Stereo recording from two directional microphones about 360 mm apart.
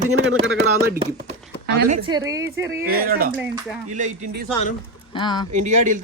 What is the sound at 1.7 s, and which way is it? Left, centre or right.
A man's voice, centre.